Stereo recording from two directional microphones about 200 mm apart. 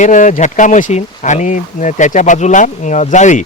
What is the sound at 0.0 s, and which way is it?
Speech, 40° left (ahead or behind).